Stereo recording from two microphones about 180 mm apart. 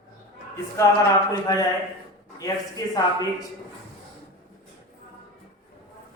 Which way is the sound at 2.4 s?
20° left (ahead or behind).